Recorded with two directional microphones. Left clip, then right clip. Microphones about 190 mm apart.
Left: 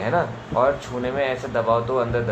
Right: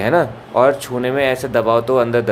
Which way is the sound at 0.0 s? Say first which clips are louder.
Right 7 dB; 60° right (ahead or behind).